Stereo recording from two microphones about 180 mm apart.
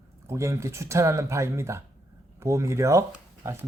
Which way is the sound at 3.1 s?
15° right (ahead or behind).